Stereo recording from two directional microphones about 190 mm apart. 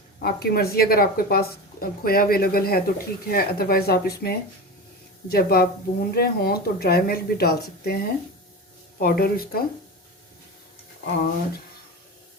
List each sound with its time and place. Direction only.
0.2 s speech: 55° left (ahead or behind)